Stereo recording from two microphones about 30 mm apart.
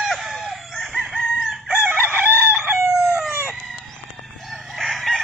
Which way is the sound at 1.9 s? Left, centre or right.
Right.